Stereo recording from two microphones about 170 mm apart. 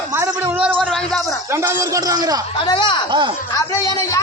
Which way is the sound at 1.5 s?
15° right (ahead or behind).